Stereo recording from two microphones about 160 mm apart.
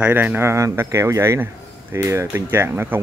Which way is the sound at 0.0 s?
10° right (ahead or behind).